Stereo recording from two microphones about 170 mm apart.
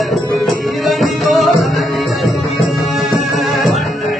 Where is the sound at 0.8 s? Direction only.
Centre (ahead or behind).